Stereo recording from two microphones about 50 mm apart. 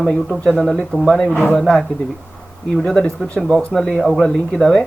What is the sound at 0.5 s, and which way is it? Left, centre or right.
Speech, centre.